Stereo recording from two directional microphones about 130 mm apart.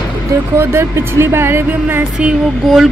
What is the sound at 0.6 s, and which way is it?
Speech, 20° right (ahead or behind).